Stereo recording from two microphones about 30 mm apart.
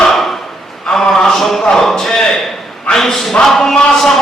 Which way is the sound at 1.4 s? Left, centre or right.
Centre.